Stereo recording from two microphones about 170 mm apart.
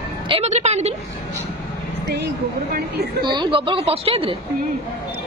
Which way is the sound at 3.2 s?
30° right (ahead or behind).